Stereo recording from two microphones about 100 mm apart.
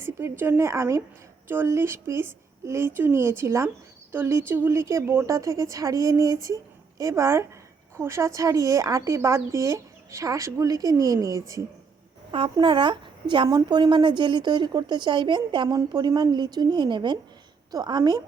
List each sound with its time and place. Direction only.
0.0 s a woman's voice: 25° right (ahead or behind)
12.3 s speech: 60° right (ahead or behind)
13.5 s speech: 45° right (ahead or behind)